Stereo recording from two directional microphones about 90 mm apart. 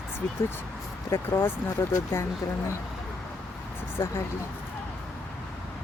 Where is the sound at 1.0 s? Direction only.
25° left (ahead or behind).